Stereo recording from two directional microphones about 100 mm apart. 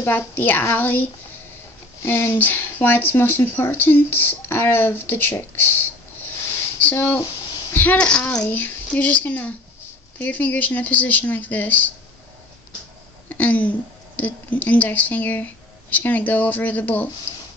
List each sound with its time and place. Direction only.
0.0 s speech: 20° left (ahead or behind)
2.0 s speech: 25° left (ahead or behind)
13.3 s a woman's voice: 15° left (ahead or behind)